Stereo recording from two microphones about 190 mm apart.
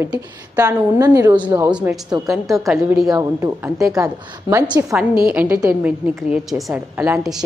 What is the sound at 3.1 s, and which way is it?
A woman's voice, 15° right (ahead or behind).